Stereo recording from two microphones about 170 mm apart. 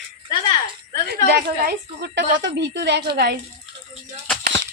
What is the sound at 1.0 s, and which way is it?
A woman's voice, 70° right (ahead or behind).